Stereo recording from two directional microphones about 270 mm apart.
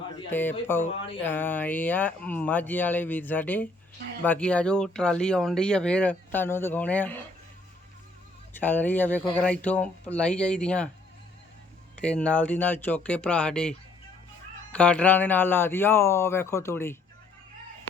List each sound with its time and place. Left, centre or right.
0.3 s speech: centre
0.9 s speech: centre
1.2 s speech: centre
8.5 s speech: centre
11.9 s speech: centre